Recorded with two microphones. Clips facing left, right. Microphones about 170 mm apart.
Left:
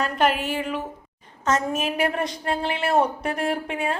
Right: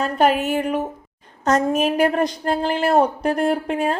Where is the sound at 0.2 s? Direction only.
40° right (ahead or behind).